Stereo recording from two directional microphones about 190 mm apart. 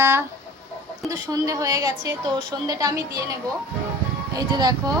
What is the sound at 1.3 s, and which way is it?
A child's voice, 15° right (ahead or behind).